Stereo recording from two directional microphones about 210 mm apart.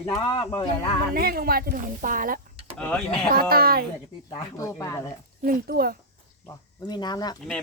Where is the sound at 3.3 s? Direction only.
45° right (ahead or behind).